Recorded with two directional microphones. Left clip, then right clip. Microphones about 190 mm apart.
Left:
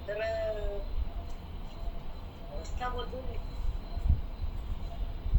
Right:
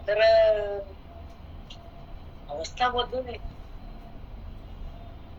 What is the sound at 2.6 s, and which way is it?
Speech, 40° right (ahead or behind).